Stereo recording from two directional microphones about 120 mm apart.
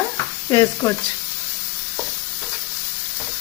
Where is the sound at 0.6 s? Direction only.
25° left (ahead or behind).